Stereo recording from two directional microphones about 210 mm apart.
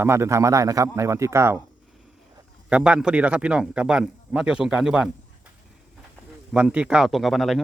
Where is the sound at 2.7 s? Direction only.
5° right (ahead or behind).